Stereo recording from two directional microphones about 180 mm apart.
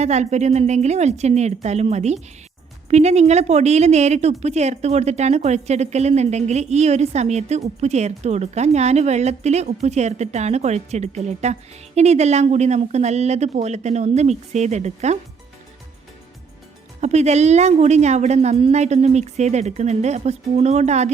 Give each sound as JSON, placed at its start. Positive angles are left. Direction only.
{"t": 0.0, "sound": "a woman's voice", "side_deg": -40}
{"t": 17.0, "sound": "a woman's voice", "side_deg": -40}